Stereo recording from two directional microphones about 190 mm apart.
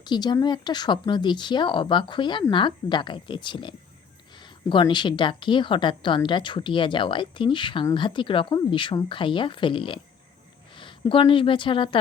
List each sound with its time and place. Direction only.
0.0 s a woman's voice: 20° left (ahead or behind)